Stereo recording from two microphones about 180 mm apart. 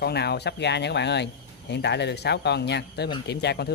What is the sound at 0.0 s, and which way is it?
Speech, 65° left (ahead or behind).